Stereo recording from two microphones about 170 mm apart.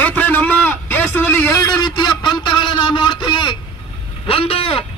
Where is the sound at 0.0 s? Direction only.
10° left (ahead or behind).